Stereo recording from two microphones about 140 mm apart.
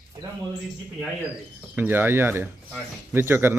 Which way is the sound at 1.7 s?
15° right (ahead or behind).